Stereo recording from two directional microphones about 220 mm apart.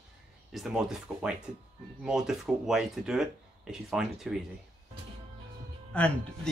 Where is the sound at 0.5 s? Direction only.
Centre (ahead or behind).